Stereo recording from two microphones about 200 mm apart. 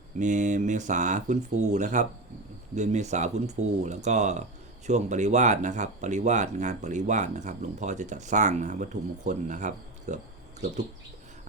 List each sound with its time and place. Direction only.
0.2 s speech: 40° right (ahead or behind)